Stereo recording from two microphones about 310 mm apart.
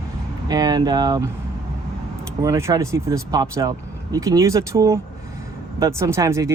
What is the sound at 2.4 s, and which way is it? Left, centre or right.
Speech, centre.